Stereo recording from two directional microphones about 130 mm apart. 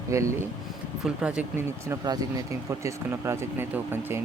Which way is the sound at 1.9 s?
30° right (ahead or behind).